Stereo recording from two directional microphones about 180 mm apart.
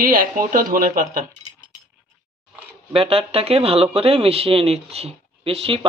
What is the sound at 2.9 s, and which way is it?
Speech, 30° right (ahead or behind).